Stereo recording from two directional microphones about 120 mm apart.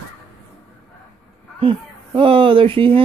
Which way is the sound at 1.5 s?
50° right (ahead or behind).